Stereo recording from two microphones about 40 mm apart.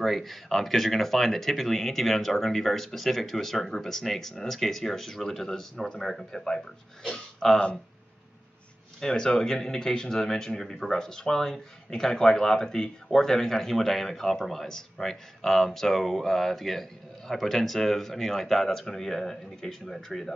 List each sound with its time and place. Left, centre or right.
0.0 s speech: centre
9.0 s speech: centre